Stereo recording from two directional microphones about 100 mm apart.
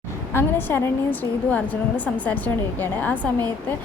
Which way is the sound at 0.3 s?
25° left (ahead or behind).